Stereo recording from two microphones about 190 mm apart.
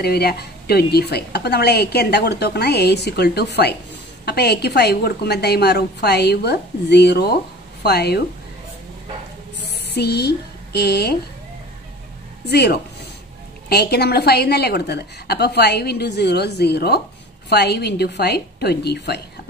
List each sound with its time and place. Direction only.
0.0 s a woman's voice: 55° left (ahead or behind)
9.9 s a woman's voice: 60° left (ahead or behind)
12.4 s a woman's voice: 60° left (ahead or behind)